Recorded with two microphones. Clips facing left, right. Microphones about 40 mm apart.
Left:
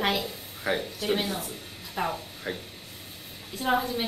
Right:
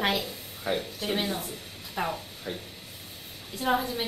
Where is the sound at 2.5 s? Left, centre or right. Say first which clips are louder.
Left 2 dB; left.